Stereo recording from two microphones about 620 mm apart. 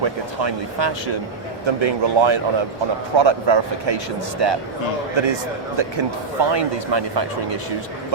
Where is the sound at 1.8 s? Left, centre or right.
Right.